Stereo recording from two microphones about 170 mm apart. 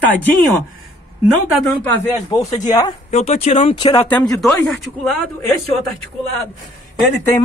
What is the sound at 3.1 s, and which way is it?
Speech, 40° left (ahead or behind).